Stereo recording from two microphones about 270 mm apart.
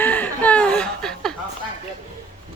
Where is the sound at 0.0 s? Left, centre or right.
Centre.